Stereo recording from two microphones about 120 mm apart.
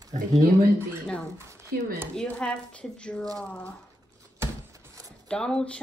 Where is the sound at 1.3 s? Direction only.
25° right (ahead or behind).